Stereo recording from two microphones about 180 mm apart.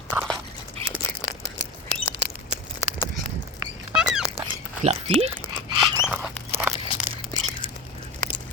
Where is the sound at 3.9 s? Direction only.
Centre (ahead or behind).